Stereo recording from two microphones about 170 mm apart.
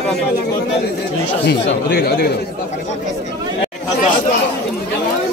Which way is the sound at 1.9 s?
65° left (ahead or behind).